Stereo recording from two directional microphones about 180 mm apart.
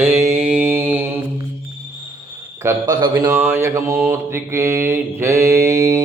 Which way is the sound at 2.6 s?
20° right (ahead or behind).